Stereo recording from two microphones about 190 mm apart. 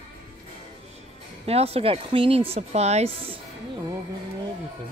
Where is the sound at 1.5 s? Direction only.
30° right (ahead or behind).